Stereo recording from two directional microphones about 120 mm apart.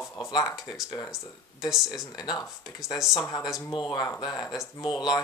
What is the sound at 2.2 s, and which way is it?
Speech, 35° left (ahead or behind).